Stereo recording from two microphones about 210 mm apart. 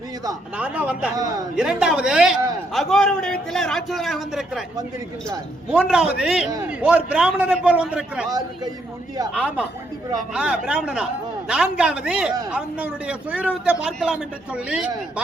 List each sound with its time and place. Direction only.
0.5 s a man's voice: 5° right (ahead or behind)
5.7 s a man's voice: 5° right (ahead or behind)
8.3 s a man's voice: 20° right (ahead or behind)
9.3 s a man's voice: 5° right (ahead or behind)